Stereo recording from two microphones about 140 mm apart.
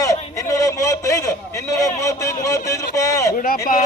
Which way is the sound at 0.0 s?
25° left (ahead or behind).